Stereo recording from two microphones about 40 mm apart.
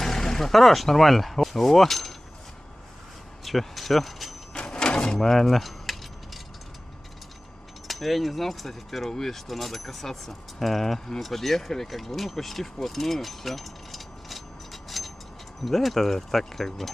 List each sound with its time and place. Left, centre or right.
0.0 s speech: centre
3.4 s speech: centre
4.6 s a sound: left
5.2 s keys jangling: centre
7.9 s speech: centre
12.8 s keys jangling: centre
15.6 s speech: centre